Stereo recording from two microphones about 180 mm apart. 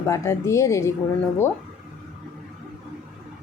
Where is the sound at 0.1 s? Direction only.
15° left (ahead or behind).